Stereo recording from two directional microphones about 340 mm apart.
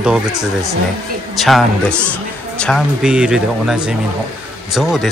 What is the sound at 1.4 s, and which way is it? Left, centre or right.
Speech, centre.